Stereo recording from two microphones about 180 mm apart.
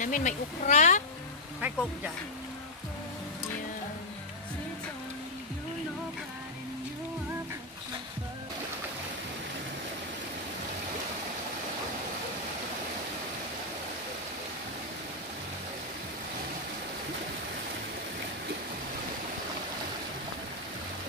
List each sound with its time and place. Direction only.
0.0 s speech: 45° left (ahead or behind)
1.6 s speech: 5° right (ahead or behind)